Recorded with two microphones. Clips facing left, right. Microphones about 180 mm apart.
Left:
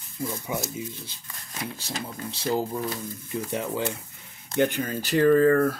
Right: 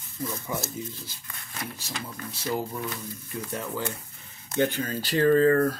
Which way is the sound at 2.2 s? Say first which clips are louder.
Left 4 dB; 30° left (ahead or behind).